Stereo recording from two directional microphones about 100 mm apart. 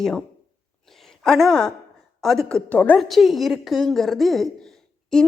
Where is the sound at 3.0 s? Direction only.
Centre (ahead or behind).